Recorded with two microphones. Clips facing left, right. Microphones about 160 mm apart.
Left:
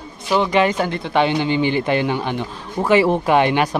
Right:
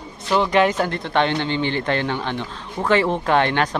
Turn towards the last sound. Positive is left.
turn(degrees=10)  # may be behind; listen again after turning